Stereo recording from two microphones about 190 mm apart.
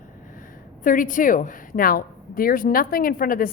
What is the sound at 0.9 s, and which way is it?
A woman's voice, 45° left (ahead or behind).